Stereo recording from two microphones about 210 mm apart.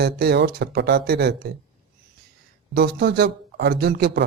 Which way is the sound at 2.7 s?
50° right (ahead or behind).